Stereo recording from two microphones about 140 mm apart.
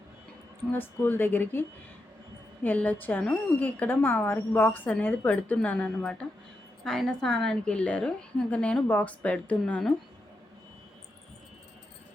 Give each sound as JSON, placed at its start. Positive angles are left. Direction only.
{"t": 0.7, "sound": "a woman's voice", "side_deg": 15}
{"t": 2.6, "sound": "a woman's voice", "side_deg": 10}